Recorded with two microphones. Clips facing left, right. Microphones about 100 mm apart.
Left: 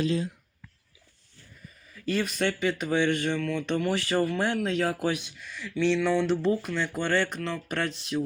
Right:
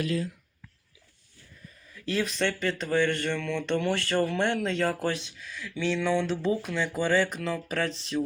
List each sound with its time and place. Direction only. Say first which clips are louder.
0.0 s speech: left 2 dB; 25° left (ahead or behind)
2.0 s speech: left 1 dB; 5° left (ahead or behind)